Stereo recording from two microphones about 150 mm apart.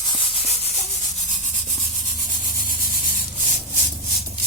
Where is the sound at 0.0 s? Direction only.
35° left (ahead or behind).